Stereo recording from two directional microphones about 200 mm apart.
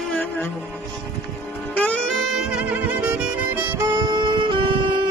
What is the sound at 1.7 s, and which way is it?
Music, 5° left (ahead or behind).